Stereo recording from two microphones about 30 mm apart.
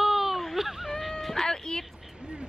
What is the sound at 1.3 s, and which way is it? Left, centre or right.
Speech, centre.